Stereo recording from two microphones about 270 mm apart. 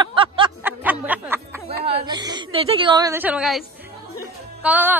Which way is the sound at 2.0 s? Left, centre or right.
Centre.